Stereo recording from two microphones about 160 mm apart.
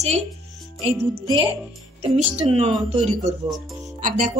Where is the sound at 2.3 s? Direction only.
40° right (ahead or behind).